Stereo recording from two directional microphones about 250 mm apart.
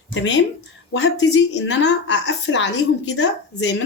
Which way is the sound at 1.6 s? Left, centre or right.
Left.